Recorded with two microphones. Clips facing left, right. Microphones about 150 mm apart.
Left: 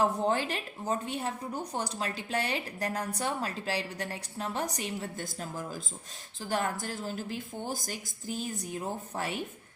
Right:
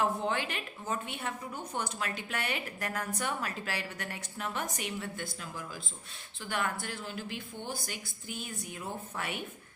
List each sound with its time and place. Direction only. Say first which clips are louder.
0.0 s a woman's voice: left 3 dB; 35° left (ahead or behind)